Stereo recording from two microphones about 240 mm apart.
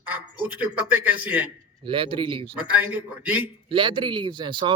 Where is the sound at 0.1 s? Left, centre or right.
Centre.